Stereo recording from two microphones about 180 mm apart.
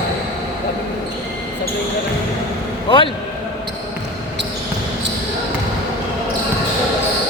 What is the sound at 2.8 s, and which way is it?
Speech, 25° left (ahead or behind).